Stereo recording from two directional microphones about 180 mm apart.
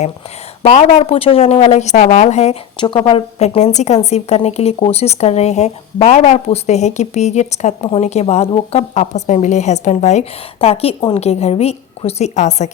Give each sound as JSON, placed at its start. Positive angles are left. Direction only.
{"t": 0.6, "sound": "a woman's voice", "side_deg": 35}